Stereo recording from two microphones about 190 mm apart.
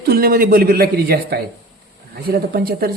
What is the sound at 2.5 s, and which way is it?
Speech, 55° right (ahead or behind).